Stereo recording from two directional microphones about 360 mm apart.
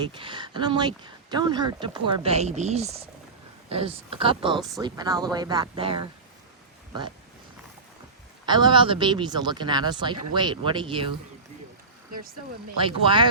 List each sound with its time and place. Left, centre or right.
0.1 s speech: centre
8.4 s speech: centre
12.8 s speech: centre